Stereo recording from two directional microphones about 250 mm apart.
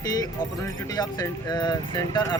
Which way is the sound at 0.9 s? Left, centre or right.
Centre.